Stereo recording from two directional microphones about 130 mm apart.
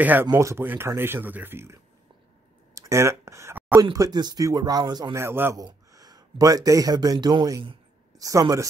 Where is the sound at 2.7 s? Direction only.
20° right (ahead or behind).